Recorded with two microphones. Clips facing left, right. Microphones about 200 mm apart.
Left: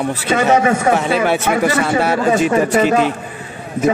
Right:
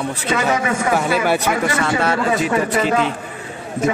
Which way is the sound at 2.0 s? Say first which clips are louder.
Left 4 dB; 25° left (ahead or behind).